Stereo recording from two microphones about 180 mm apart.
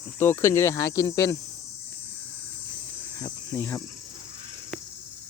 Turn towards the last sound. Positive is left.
turn(degrees=15)  # may be behind; listen again after turning